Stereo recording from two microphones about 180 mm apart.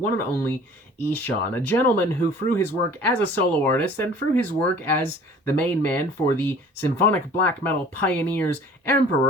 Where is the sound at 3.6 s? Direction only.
10° left (ahead or behind).